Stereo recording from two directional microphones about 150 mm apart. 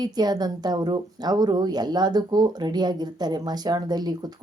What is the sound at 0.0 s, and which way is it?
A woman's voice, 25° right (ahead or behind).